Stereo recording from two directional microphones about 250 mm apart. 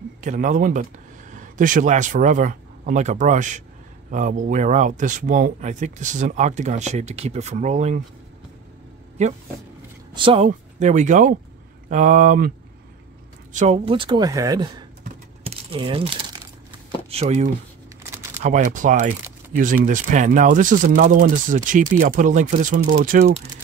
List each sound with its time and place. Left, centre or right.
0.2 s a man's voice: right
10.1 s speech: right
15.4 s crumpling: right
17.1 s speech: right